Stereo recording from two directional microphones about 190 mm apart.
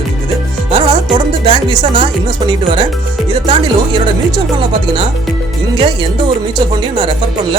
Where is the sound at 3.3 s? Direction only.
25° right (ahead or behind).